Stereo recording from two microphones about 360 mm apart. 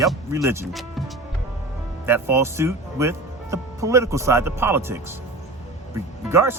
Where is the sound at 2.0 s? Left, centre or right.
Centre.